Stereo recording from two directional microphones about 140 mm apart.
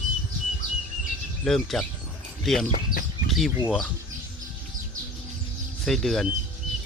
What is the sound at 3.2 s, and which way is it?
Bird, centre (ahead or behind).